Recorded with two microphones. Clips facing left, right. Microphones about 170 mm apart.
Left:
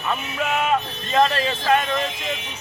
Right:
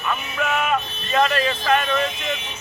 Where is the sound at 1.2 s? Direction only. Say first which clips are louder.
Left 1 dB; 30° left (ahead or behind).